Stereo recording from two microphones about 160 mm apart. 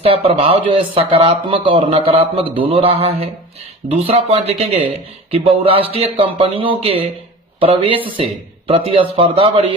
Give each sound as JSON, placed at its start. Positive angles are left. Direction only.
{"t": 0.0, "sound": "speech", "side_deg": -35}